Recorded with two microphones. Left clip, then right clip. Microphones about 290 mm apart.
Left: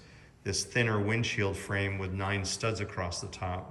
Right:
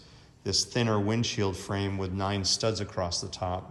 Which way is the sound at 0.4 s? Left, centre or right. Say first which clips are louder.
Right 2 dB; centre.